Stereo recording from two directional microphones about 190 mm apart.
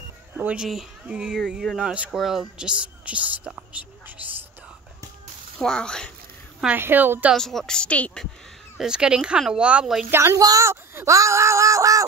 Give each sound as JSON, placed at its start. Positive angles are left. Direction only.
{"t": 0.4, "sound": "speech", "side_deg": -5}
{"t": 5.6, "sound": "speech", "side_deg": 5}
{"t": 6.6, "sound": "speech", "side_deg": -10}
{"t": 7.3, "sound": "speech", "side_deg": 0}
{"t": 10.1, "sound": "speech", "side_deg": -15}